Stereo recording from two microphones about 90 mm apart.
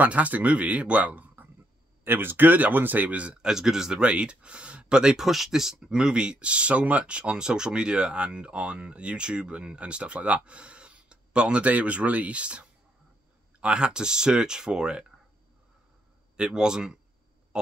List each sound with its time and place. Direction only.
0.0 s speech: 15° right (ahead or behind)
16.3 s speech: 10° right (ahead or behind)